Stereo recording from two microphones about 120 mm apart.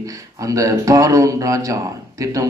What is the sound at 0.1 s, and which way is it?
Speech, 30° right (ahead or behind).